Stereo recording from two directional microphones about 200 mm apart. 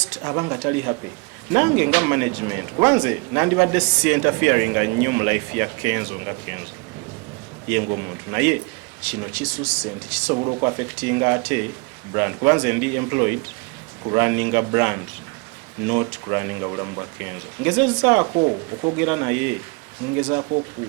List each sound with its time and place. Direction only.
0.2 s speech: 15° right (ahead or behind)
7.9 s speech: 10° right (ahead or behind)
10.3 s speech: 25° right (ahead or behind)
10.6 s speech: 15° right (ahead or behind)
18.3 s speech: 25° right (ahead or behind)
18.9 s speech: 10° right (ahead or behind)